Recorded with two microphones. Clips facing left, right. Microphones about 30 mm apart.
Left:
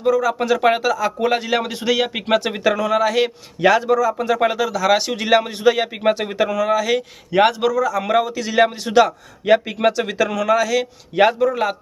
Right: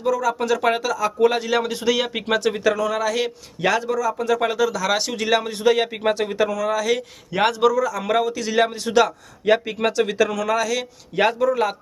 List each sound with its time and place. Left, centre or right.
0.0 s speech: centre